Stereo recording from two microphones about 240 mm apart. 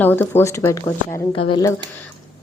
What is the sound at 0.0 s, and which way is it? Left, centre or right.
A woman's voice, centre.